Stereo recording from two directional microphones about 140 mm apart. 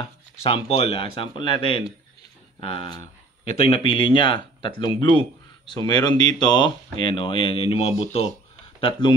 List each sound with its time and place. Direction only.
0.0 s a man's voice: 45° left (ahead or behind)